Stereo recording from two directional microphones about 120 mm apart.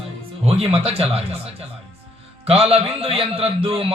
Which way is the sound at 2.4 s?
55° right (ahead or behind).